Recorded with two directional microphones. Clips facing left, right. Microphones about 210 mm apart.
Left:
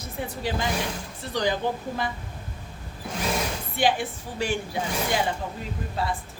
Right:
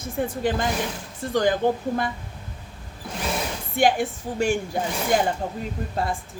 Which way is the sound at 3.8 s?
45° right (ahead or behind).